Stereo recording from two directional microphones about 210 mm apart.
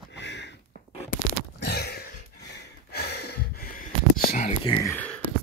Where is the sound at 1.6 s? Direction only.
50° left (ahead or behind); by 4.7 s 35° left (ahead or behind).